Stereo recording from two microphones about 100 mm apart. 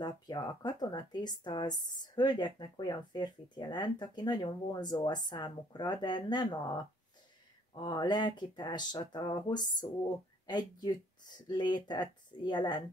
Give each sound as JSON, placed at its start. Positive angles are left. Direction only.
{"t": 0.0, "sound": "speech", "side_deg": 45}